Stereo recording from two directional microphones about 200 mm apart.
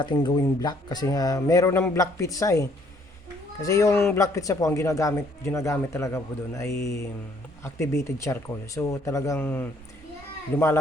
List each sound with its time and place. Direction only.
0.0 s speech: 20° left (ahead or behind)